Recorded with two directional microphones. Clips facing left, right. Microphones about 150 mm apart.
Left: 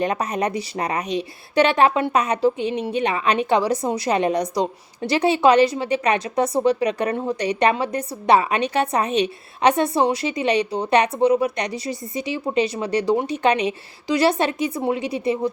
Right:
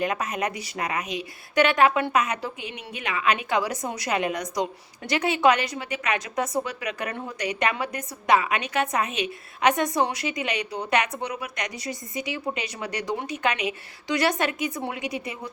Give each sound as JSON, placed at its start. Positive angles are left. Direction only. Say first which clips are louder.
{"t": 0.0, "sound": "a woman's voice", "louder": "left 5 dB", "side_deg": 35}